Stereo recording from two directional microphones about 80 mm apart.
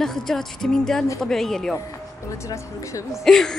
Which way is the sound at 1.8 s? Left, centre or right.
Left.